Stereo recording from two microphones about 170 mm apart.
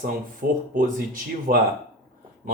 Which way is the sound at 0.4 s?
55° right (ahead or behind).